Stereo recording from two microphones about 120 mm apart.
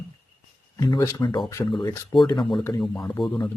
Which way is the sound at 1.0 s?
35° left (ahead or behind).